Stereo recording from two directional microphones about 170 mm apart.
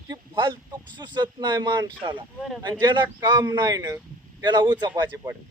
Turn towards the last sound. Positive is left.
turn(degrees=-25)  # may be behind; listen again after turning